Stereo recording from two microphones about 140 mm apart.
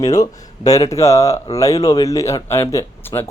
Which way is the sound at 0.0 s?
25° left (ahead or behind).